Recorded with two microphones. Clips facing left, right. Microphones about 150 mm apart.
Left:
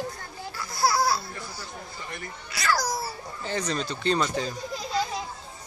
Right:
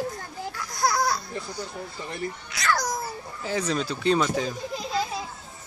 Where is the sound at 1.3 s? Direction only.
20° right (ahead or behind).